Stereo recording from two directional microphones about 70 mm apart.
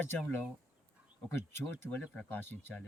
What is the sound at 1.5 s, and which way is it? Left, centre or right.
Speech, left.